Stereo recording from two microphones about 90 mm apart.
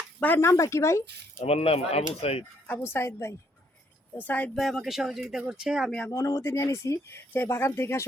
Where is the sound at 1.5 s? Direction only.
90° left.